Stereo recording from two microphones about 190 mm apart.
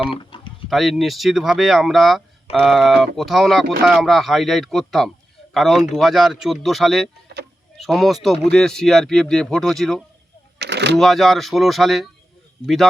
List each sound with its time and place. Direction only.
0.0 s speech: 30° left (ahead or behind)
0.7 s speech: centre (ahead or behind)
10.6 s a sound: 60° right (ahead or behind)
10.9 s speech: centre (ahead or behind)